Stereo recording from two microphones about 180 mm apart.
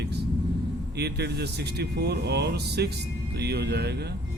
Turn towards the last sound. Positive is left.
turn(degrees=-65)  # may be behind; listen again after turning